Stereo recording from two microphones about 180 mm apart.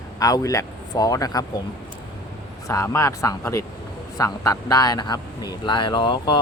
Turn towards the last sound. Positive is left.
turn(degrees=25)  # may be behind; listen again after turning